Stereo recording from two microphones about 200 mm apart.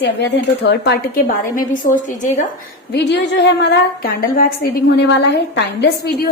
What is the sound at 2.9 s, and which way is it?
Speech, 60° left (ahead or behind).